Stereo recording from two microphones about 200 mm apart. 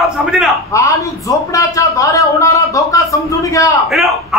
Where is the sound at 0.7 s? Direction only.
15° left (ahead or behind).